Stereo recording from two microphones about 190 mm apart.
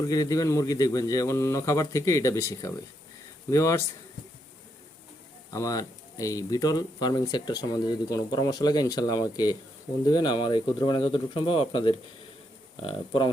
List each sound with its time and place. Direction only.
0.1 s a man's voice: 20° left (ahead or behind)
5.5 s speech: 15° left (ahead or behind)